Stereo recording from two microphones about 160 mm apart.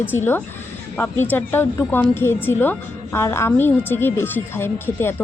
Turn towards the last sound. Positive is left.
turn(degrees=15)  # may be behind; listen again after turning